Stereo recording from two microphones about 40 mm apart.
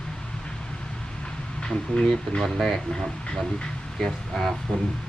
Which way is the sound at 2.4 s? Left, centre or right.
Centre.